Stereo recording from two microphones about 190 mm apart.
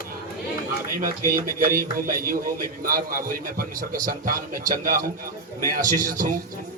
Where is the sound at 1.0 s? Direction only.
45° right (ahead or behind).